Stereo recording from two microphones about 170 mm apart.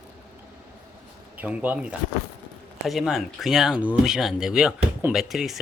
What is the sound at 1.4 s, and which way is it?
Speech, 10° right (ahead or behind).